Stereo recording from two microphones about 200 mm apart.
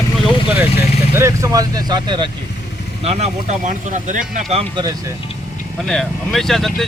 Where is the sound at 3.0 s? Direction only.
35° right (ahead or behind).